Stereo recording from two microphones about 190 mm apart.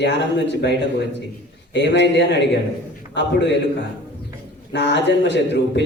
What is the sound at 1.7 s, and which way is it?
A man's voice, 65° left (ahead or behind).